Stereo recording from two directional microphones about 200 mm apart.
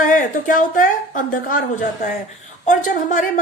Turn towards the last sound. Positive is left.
turn(degrees=40)  # may be behind; listen again after turning